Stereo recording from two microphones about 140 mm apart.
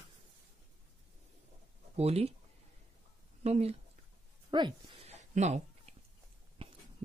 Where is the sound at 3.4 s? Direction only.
50° right (ahead or behind).